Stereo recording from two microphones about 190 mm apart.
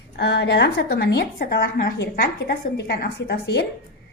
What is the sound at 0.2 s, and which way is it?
A woman's voice, 65° left (ahead or behind).